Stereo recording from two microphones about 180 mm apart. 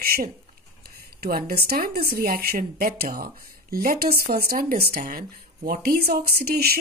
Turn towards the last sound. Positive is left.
turn(degrees=-60)  # may be behind; listen again after turning